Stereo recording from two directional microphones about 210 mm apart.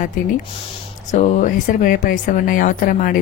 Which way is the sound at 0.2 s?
40° left (ahead or behind).